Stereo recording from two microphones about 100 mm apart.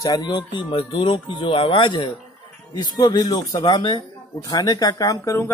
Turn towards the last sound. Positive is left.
turn(degrees=30)  # may be behind; listen again after turning